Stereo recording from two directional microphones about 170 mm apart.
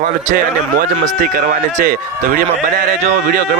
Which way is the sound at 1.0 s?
55° right (ahead or behind).